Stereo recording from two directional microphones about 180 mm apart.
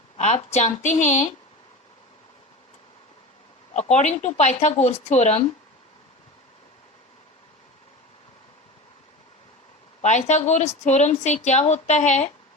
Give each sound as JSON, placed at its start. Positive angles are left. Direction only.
{"t": 0.2, "sound": "a woman's voice", "side_deg": 40}
{"t": 3.8, "sound": "a woman's voice", "side_deg": 40}
{"t": 10.0, "sound": "a woman's voice", "side_deg": 40}